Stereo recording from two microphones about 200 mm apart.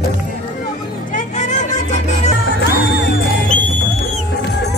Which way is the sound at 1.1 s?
35° left (ahead or behind).